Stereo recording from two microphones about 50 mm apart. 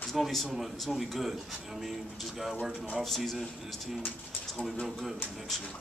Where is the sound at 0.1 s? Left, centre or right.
Centre.